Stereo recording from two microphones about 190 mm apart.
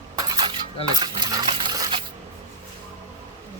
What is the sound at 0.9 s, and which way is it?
Cutlery, 20° right (ahead or behind).